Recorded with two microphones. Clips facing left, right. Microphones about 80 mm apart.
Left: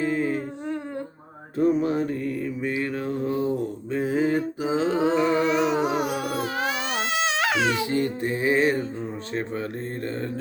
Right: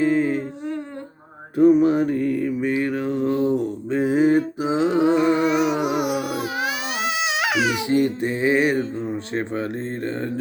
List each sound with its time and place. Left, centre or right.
0.0 s humming: right
1.5 s mantra: centre
3.5 s a sound: right
5.0 s music: centre
5.7 s music: left
6.0 s baby cry: centre
8.0 s music: right